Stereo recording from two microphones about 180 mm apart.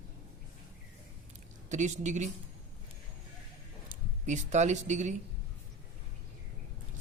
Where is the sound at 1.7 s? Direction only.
40° right (ahead or behind).